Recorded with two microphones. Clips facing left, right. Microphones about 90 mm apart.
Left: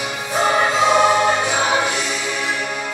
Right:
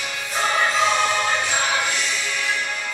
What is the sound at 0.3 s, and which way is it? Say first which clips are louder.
Music: left 4 dB; 25° left (ahead or behind).